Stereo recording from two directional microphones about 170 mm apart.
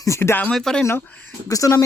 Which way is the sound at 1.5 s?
20° left (ahead or behind).